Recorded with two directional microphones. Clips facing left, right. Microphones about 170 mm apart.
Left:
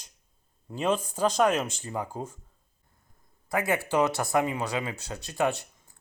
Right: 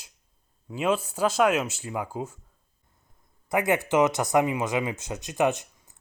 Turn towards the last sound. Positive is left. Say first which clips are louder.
# right 3 dB
turn(degrees=-20)  # may be behind; listen again after turning